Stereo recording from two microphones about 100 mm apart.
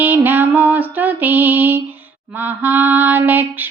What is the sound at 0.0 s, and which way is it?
Music, 20° right (ahead or behind).